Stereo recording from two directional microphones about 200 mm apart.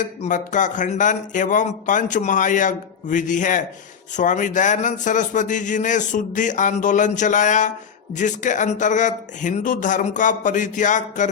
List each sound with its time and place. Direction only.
0.0 s speech: 40° left (ahead or behind)